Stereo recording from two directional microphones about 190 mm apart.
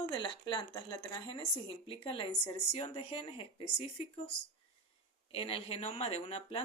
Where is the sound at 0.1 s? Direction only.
25° left (ahead or behind).